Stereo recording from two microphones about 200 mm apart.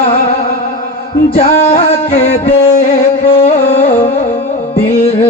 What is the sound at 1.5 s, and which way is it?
Music, 40° left (ahead or behind).